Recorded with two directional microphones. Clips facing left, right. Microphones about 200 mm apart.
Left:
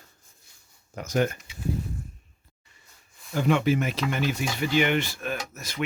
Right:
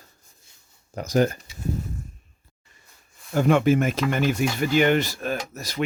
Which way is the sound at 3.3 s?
45° right (ahead or behind).